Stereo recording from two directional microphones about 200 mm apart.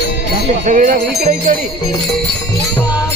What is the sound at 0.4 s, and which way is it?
Speech, 40° right (ahead or behind).